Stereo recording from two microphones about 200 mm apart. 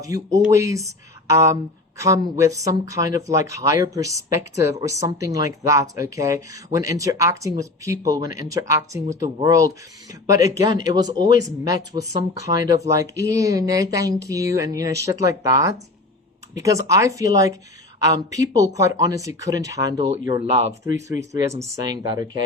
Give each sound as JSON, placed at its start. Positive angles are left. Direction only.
{"t": 0.0, "sound": "speech", "side_deg": -15}